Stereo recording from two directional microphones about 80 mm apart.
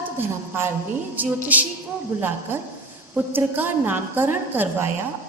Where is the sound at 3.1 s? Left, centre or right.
Right.